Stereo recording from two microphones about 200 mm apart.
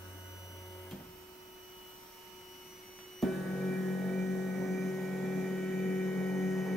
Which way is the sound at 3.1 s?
Centre (ahead or behind).